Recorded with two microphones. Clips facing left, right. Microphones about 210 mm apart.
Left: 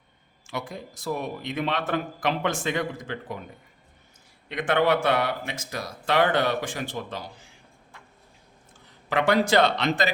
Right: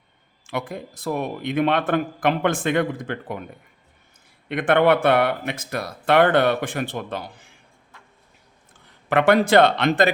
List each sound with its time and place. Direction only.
0.4 s speech: 55° right (ahead or behind)
4.4 s speech: 55° right (ahead or behind)
9.0 s speech: 55° right (ahead or behind)